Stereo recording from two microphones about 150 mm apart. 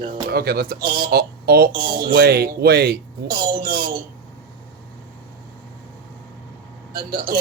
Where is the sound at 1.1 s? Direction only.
90° right.